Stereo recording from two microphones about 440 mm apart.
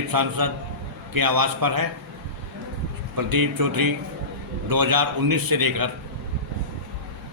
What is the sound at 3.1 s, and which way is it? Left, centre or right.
A man's voice, right.